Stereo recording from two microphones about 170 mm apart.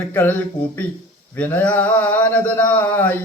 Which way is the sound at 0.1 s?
10° left (ahead or behind).